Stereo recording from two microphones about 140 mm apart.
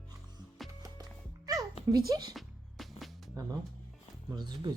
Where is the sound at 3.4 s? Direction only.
25° right (ahead or behind).